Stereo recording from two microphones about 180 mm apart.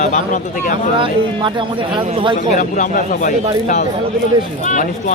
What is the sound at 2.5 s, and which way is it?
Speech, 45° left (ahead or behind).